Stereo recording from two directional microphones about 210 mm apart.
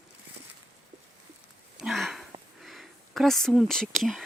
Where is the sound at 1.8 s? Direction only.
Centre (ahead or behind).